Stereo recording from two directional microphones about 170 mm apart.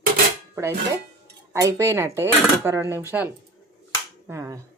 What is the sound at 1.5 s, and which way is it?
A woman's voice, 15° right (ahead or behind).